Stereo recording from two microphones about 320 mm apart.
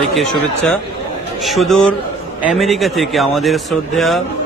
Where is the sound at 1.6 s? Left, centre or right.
Centre.